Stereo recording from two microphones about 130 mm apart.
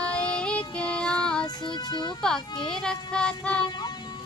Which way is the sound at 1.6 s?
35° left (ahead or behind).